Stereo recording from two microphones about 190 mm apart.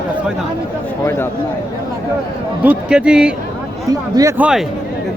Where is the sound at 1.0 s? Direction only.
10° left (ahead or behind).